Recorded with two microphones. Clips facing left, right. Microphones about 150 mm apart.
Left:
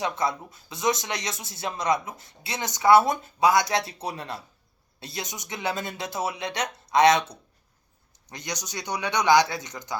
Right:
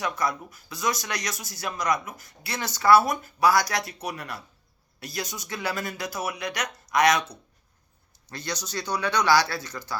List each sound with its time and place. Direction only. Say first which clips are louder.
0.0 s speech: left 1 dB; 25° left (ahead or behind)